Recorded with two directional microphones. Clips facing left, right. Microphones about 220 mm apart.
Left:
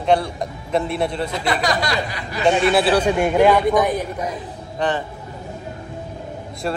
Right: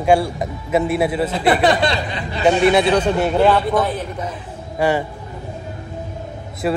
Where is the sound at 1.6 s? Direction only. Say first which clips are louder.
Right 5 dB; 25° right (ahead or behind).